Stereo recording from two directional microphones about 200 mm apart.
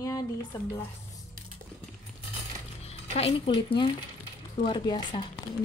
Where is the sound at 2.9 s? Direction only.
30° left (ahead or behind).